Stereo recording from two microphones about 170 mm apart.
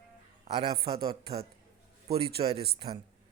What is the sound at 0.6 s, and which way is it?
A man's voice, 35° right (ahead or behind).